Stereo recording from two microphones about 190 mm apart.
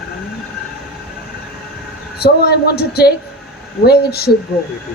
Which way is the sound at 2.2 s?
55° left (ahead or behind).